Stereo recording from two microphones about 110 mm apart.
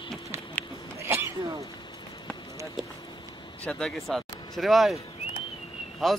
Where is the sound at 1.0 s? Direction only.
25° right (ahead or behind).